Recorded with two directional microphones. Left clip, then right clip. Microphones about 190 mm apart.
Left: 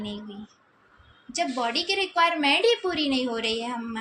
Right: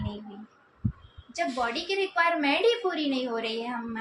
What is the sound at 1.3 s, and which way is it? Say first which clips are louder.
A woman's voice: left 2 dB; 45° left (ahead or behind).